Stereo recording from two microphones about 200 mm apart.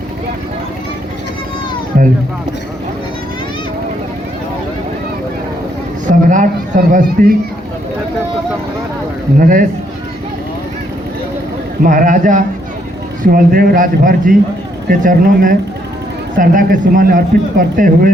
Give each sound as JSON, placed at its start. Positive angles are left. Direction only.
{"t": 6.1, "sound": "a man's voice", "side_deg": -40}
{"t": 9.4, "sound": "a man's voice", "side_deg": -45}
{"t": 11.8, "sound": "a man's voice", "side_deg": -45}